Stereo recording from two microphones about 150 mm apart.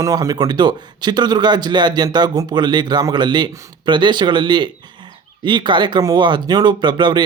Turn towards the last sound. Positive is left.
turn(degrees=-30)  # may be behind; listen again after turning